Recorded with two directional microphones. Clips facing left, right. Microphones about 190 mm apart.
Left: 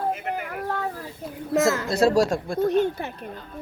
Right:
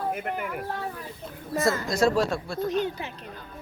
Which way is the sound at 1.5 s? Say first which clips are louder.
Left 4 dB; 80° left.